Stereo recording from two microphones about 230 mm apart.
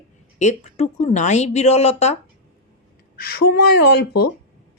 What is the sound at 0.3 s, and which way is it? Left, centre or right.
A woman's voice, left.